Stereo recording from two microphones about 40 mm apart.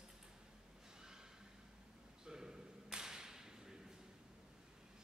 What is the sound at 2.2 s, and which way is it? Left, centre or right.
Whip, centre.